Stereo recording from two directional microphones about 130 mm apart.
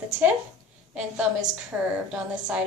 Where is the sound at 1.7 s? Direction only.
15° right (ahead or behind).